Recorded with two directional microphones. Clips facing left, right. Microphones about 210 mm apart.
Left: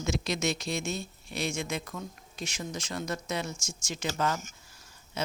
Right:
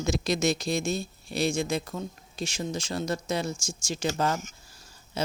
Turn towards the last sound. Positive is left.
turn(degrees=-35)  # may be behind; listen again after turning